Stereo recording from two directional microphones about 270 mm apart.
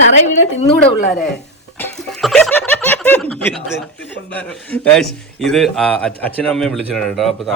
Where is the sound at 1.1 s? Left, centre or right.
Centre.